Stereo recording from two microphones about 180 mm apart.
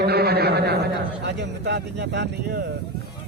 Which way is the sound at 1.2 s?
75° right (ahead or behind).